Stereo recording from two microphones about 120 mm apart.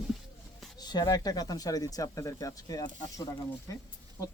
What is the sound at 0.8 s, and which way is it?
Speech, 35° left (ahead or behind).